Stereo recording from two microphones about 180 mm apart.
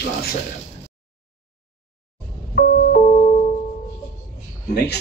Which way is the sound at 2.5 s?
55° left (ahead or behind).